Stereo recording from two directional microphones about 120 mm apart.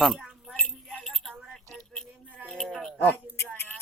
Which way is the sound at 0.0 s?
Centre (ahead or behind).